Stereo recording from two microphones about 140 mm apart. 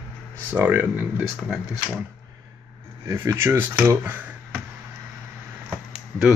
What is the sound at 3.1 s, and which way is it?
Speech, 20° right (ahead or behind).